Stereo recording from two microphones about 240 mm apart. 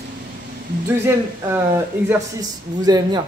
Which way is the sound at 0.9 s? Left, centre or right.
Centre.